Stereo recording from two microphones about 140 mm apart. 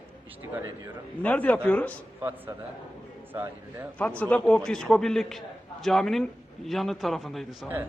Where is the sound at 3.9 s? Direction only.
10° left (ahead or behind).